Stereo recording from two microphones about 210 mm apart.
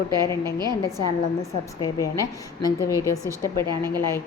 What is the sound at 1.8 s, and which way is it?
Speech, 15° left (ahead or behind).